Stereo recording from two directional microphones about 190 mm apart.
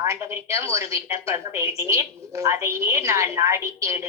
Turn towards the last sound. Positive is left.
turn(degrees=-15)  # may be behind; listen again after turning